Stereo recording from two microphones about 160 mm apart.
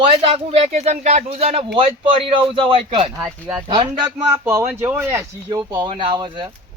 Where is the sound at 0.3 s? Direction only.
40° right (ahead or behind).